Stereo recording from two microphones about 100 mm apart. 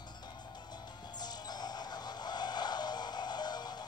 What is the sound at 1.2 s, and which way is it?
Music, 45° left (ahead or behind).